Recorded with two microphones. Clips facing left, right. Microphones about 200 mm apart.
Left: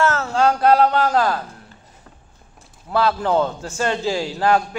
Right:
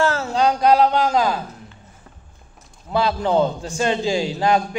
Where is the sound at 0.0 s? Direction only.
30° right (ahead or behind).